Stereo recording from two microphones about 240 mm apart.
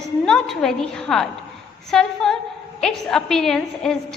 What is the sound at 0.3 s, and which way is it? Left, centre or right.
A woman's voice, centre.